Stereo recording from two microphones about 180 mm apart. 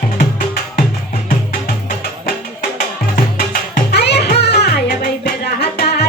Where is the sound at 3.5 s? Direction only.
65° left (ahead or behind).